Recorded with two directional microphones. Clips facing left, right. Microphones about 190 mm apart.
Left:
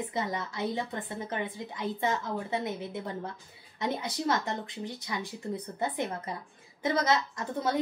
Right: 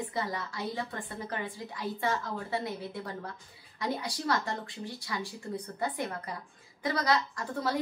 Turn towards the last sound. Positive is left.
turn(degrees=20)  # may be behind; listen again after turning